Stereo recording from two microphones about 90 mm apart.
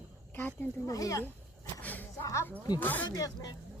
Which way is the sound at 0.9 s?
40° left (ahead or behind).